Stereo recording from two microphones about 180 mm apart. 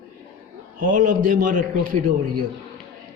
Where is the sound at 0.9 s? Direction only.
45° right (ahead or behind).